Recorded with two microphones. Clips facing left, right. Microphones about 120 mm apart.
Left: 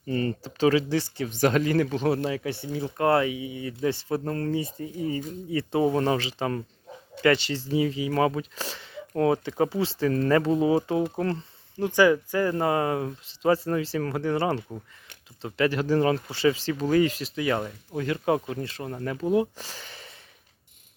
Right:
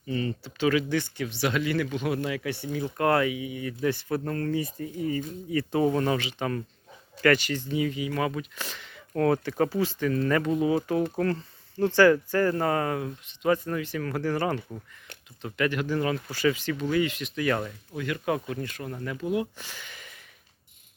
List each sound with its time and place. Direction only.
0.1 s speech: 45° left (ahead or behind)
9.2 s speech: 20° left (ahead or behind)
17.4 s speech: 20° left (ahead or behind)
17.9 s speech: 30° left (ahead or behind)